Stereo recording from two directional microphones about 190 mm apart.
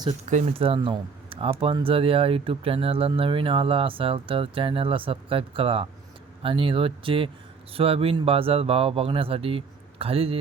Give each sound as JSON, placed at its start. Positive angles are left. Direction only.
{"t": 0.3, "sound": "speech", "side_deg": -35}